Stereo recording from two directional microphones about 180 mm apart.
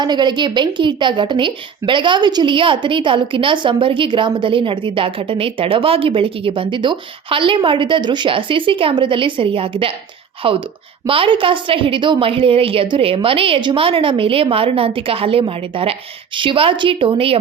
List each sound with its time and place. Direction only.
0.0 s a woman's voice: 25° right (ahead or behind)